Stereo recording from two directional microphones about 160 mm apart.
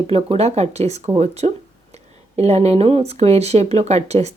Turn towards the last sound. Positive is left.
turn(degrees=-40)  # may be behind; listen again after turning